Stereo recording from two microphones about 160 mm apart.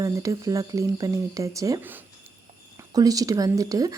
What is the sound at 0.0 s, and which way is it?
A woman's voice, 20° right (ahead or behind).